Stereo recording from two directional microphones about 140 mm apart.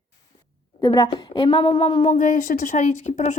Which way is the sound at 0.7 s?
25° left (ahead or behind).